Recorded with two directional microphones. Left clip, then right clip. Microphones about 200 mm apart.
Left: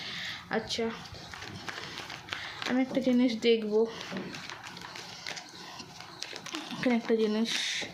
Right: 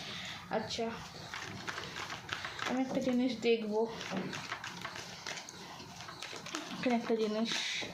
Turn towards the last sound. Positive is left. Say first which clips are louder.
# left 4 dB
turn(degrees=30)  # may be behind; listen again after turning